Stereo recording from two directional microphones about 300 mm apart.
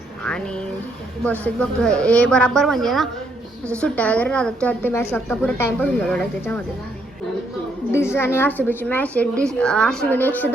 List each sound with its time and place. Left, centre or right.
0.3 s a sound: centre
1.2 s a woman's voice: centre
7.9 s a woman's voice: centre